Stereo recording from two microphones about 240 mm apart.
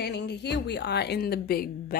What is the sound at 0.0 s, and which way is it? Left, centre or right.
A woman's voice, left.